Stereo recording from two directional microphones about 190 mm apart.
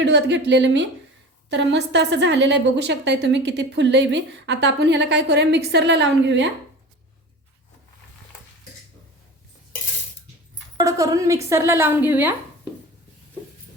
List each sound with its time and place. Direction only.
0.0 s a woman's voice: 65° right (ahead or behind)
10.8 s speech: 15° right (ahead or behind)